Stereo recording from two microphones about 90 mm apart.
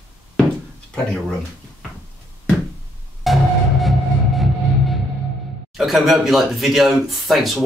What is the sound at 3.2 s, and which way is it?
Music, centre (ahead or behind).